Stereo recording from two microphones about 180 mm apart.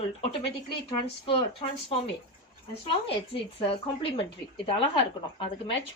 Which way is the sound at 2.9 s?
30° left (ahead or behind).